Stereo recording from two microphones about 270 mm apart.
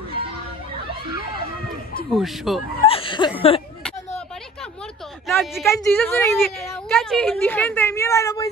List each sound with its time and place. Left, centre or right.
2.1 s speech: centre
2.8 s speech: centre
5.3 s a woman's voice: centre